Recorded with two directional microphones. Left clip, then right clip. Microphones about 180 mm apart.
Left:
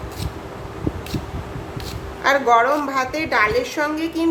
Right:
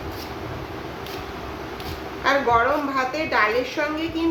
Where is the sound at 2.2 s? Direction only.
25° left (ahead or behind).